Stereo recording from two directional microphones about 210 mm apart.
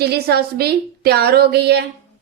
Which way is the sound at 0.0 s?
50° right (ahead or behind).